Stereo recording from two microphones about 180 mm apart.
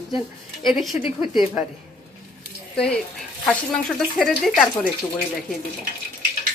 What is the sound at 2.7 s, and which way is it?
Speech, 5° left (ahead or behind).